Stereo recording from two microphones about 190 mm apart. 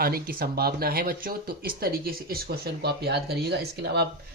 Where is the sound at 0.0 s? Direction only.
55° right (ahead or behind).